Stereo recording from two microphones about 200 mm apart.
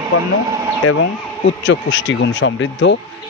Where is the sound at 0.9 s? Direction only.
70° left (ahead or behind).